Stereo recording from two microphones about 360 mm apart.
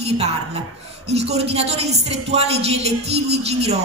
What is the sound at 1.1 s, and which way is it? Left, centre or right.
A woman's voice, centre.